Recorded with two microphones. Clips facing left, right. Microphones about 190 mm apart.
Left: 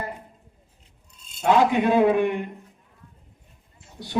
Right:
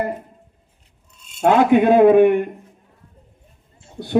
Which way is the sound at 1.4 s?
55° right (ahead or behind).